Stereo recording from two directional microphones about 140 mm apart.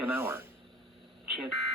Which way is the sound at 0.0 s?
15° right (ahead or behind).